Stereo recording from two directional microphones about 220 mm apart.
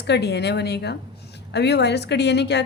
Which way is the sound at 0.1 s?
50° left (ahead or behind).